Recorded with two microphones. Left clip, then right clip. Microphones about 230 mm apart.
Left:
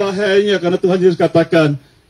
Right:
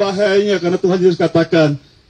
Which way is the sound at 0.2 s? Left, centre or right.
Left.